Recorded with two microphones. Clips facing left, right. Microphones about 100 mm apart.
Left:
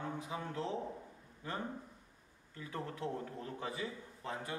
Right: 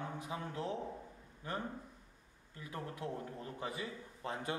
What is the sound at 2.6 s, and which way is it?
Speech, 15° right (ahead or behind).